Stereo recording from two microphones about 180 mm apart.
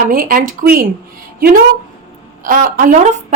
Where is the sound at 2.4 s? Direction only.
50° right (ahead or behind).